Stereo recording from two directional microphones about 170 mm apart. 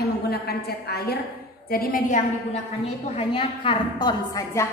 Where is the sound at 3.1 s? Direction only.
35° left (ahead or behind).